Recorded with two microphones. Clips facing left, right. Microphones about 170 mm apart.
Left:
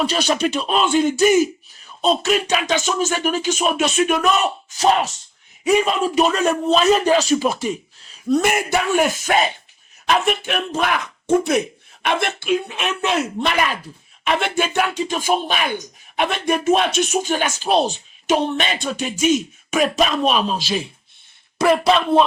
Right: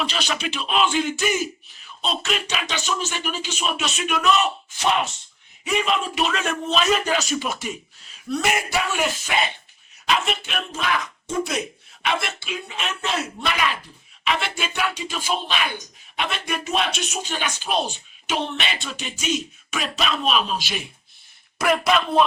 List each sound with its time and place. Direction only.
0.0 s a man's voice: 40° left (ahead or behind); by 13.1 s 60° left (ahead or behind)
14.3 s a man's voice: 50° left (ahead or behind); by 22.2 s 30° left (ahead or behind)